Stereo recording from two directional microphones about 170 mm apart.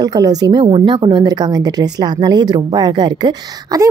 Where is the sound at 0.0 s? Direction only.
20° right (ahead or behind).